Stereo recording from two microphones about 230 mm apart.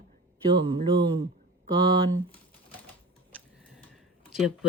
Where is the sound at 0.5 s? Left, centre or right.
Centre.